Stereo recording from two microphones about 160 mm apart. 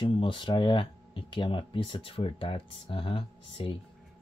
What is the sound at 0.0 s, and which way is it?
Speech, 30° left (ahead or behind).